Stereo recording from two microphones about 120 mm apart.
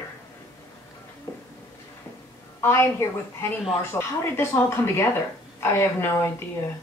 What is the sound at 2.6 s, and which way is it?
Speech, 20° left (ahead or behind).